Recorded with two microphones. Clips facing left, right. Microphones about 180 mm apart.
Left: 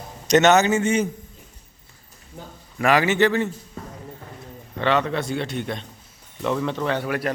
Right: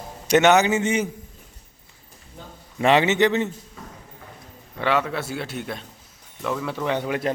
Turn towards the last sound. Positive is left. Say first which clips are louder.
# even
turn(degrees=-20)  # may be behind; listen again after turning